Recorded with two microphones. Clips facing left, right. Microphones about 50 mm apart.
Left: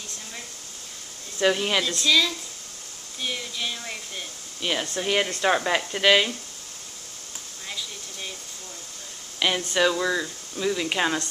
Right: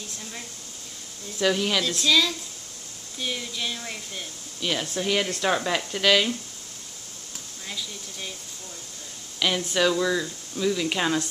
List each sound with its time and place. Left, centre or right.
1.4 s speech: centre
1.9 s speech: centre
7.6 s speech: centre
9.4 s speech: centre